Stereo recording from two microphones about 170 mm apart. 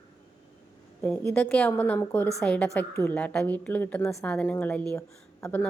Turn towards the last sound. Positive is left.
turn(degrees=15)  # may be behind; listen again after turning